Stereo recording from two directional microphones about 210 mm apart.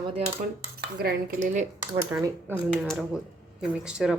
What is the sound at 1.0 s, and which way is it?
Cutlery, 40° right (ahead or behind).